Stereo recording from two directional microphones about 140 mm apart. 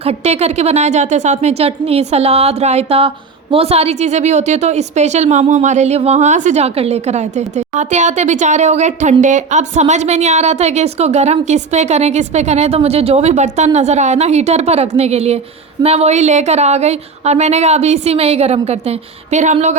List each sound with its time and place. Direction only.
0.0 s a woman's voice: 50° right (ahead or behind)